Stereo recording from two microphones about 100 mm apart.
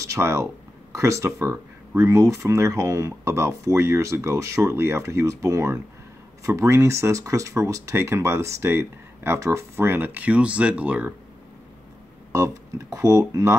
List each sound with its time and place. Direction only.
0.0 s speech: 30° right (ahead or behind)
12.3 s speech: 30° right (ahead or behind)